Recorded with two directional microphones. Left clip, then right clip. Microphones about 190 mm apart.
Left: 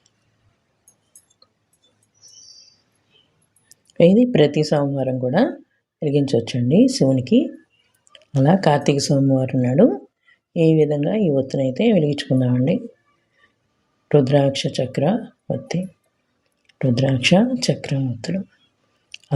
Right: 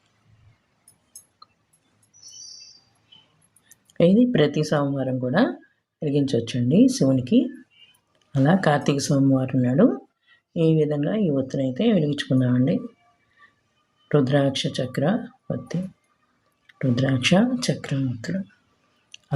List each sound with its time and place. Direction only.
3.8 s speech: 20° left (ahead or behind)
14.1 s speech: 20° left (ahead or behind)